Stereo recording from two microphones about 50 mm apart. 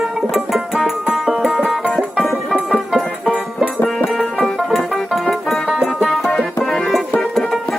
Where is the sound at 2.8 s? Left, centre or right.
Centre.